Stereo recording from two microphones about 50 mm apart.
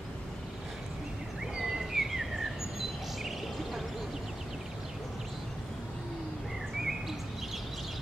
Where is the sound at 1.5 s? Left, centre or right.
Centre.